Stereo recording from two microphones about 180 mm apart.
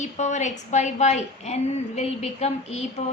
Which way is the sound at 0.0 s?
40° left (ahead or behind).